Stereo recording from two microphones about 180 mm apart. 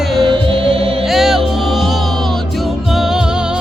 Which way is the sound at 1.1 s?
Centre (ahead or behind).